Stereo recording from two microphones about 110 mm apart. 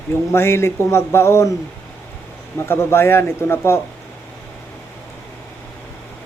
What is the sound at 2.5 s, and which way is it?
Speech, 20° left (ahead or behind).